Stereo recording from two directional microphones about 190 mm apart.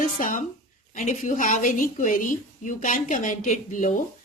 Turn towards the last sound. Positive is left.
turn(degrees=40)  # may be behind; listen again after turning